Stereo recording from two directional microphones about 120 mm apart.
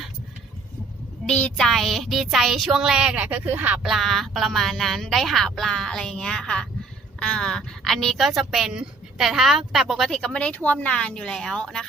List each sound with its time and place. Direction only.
1.3 s a woman's voice: 5° left (ahead or behind); by 3.8 s 15° right (ahead or behind)
3.8 s a woman's voice: centre (ahead or behind)